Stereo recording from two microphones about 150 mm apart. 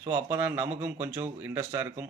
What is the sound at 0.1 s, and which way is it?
A man's voice, 15° right (ahead or behind).